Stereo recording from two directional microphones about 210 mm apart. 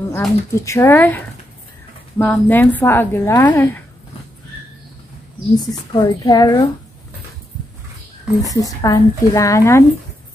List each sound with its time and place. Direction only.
0.1 s a woman's voice: 10° left (ahead or behind)
5.7 s a woman's voice: 20° left (ahead or behind)
8.5 s a woman's voice: 15° left (ahead or behind)